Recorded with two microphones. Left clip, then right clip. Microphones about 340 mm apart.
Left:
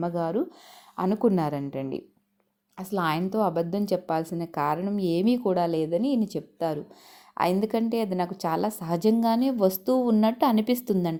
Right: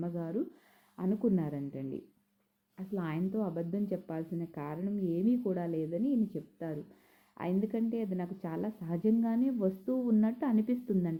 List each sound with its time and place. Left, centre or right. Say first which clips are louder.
0.0 s a woman's voice: left 10 dB; centre